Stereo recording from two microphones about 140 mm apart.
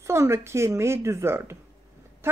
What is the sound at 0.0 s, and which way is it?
A woman's voice, 20° right (ahead or behind).